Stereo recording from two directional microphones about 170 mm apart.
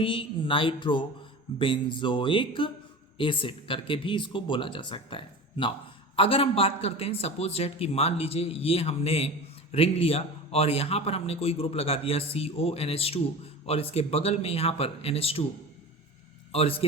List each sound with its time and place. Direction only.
0.0 s a man's voice: 30° left (ahead or behind)
16.5 s a man's voice: 35° left (ahead or behind)